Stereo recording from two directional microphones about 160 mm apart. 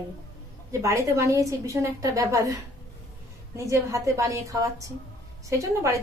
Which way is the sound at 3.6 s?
20° right (ahead or behind).